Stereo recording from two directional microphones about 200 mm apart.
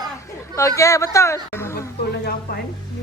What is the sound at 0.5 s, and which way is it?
Speech, 15° left (ahead or behind).